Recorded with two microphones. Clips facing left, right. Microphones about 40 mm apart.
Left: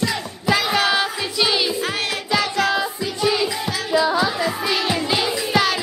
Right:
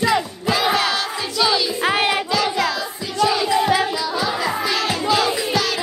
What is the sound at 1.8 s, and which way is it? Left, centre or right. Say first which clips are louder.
Music: right 5 dB; right.